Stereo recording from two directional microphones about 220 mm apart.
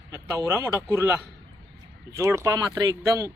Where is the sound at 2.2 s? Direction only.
10° right (ahead or behind).